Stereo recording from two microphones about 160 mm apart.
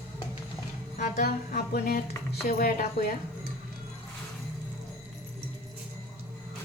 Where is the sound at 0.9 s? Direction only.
60° left (ahead or behind).